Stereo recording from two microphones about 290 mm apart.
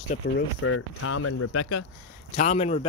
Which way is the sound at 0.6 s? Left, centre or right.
Left.